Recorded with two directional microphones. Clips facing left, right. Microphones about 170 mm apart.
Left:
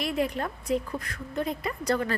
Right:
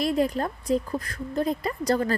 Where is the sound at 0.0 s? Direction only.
35° right (ahead or behind).